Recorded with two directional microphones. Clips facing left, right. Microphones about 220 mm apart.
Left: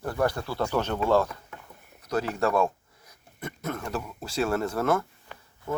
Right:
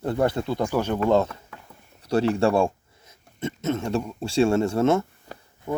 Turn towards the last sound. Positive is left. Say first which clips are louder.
# right 3 dB
turn(degrees=-15)  # may be behind; listen again after turning